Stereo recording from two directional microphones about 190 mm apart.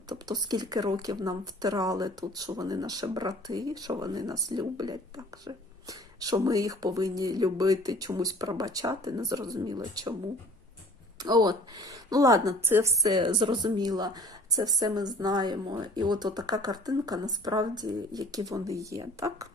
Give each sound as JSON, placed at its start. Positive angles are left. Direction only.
{"t": 0.1, "sound": "speech", "side_deg": -20}
{"t": 11.2, "sound": "speech", "side_deg": -20}